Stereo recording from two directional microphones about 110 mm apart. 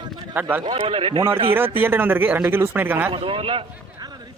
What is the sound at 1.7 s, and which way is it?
Speech, 20° right (ahead or behind).